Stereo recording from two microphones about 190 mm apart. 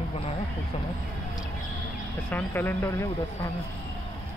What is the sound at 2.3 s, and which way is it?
Speech, 10° left (ahead or behind).